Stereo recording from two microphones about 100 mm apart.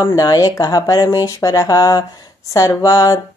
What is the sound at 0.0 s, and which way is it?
Speech, 35° left (ahead or behind).